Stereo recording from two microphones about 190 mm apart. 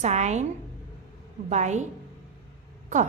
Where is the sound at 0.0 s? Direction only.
35° right (ahead or behind).